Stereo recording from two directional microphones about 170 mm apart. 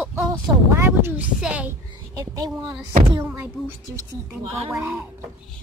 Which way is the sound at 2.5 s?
5° right (ahead or behind).